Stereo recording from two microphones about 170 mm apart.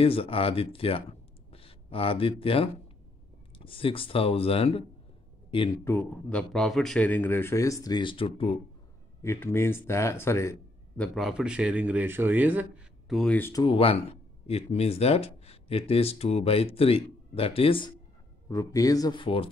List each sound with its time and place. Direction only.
0.0 s speech: 35° left (ahead or behind)
5.9 s speech: 10° left (ahead or behind); by 8.5 s 30° left (ahead or behind)
9.2 s a man's voice: 15° left (ahead or behind)
11.1 s speech: 5° right (ahead or behind)
13.6 s speech: 30° left (ahead or behind)
18.5 s speech: 20° left (ahead or behind)